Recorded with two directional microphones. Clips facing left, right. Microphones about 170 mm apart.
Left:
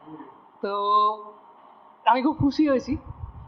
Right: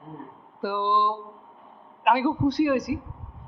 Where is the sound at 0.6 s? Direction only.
25° left (ahead or behind).